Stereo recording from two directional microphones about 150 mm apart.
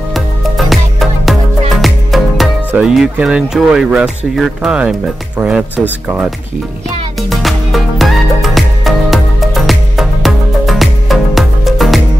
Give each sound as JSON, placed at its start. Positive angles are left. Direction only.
{"t": 0.1, "sound": "music", "side_deg": 0}
{"t": 2.7, "sound": "speech", "side_deg": -5}
{"t": 7.2, "sound": "music", "side_deg": 0}